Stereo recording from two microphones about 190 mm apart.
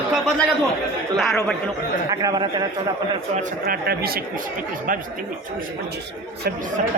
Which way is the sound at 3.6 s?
55° right (ahead or behind).